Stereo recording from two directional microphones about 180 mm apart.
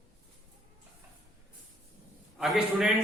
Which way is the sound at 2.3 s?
Centre (ahead or behind).